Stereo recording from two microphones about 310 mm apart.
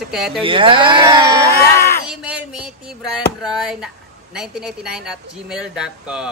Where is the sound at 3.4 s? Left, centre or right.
Centre.